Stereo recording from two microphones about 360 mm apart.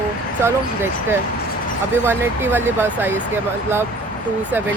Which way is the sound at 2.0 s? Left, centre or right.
Centre.